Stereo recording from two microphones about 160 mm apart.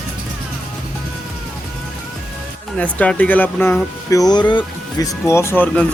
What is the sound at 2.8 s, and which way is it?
Speech, 10° left (ahead or behind).